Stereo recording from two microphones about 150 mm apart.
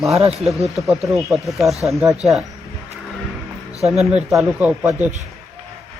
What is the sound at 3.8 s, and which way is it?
Speech, 5° right (ahead or behind).